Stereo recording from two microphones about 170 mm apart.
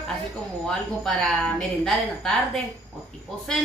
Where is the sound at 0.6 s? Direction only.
5° left (ahead or behind).